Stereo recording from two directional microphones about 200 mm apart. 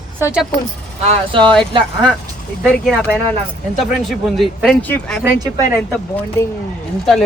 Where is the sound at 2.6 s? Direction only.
Centre (ahead or behind).